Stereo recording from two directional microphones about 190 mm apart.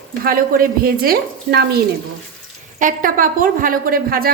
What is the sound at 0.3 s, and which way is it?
A woman's voice, 50° right (ahead or behind).